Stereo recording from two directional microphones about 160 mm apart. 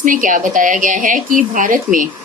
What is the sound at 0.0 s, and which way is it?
Speech, 55° right (ahead or behind).